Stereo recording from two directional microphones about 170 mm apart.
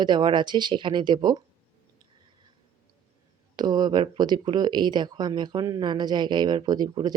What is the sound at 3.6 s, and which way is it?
Speech, 25° right (ahead or behind).